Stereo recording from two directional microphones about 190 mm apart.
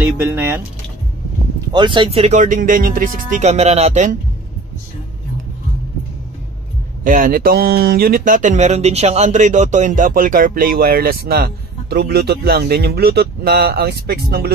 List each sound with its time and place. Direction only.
0.2 s speech: 10° right (ahead or behind)
1.7 s speech: 25° right (ahead or behind)
7.1 s speech: 45° right (ahead or behind)